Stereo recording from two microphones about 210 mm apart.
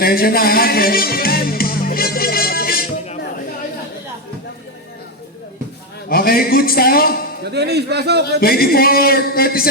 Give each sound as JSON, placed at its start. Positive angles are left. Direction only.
{"t": 0.0, "sound": "music", "side_deg": 45}
{"t": 6.1, "sound": "speech", "side_deg": 45}
{"t": 7.4, "sound": "a man's voice", "side_deg": -50}
{"t": 8.4, "sound": "speech", "side_deg": 45}